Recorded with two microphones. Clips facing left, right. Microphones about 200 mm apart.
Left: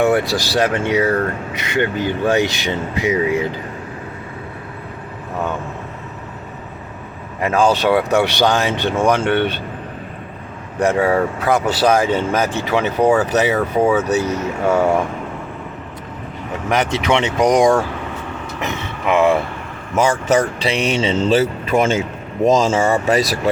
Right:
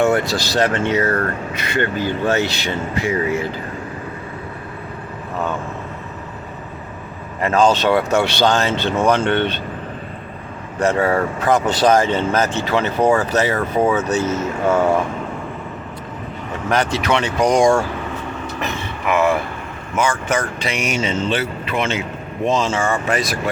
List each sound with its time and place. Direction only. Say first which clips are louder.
0.0 s speech: left 1 dB; 15° left (ahead or behind)
7.4 s speech: even; 10° left (ahead or behind)
10.8 s speech: left 1 dB; 10° left (ahead or behind)
16.6 s speech: left 1 dB; 20° left (ahead or behind)
18.6 s a sound: left 2 dB; 20° left (ahead or behind)
20.0 s speech: left 4 dB; 40° left (ahead or behind)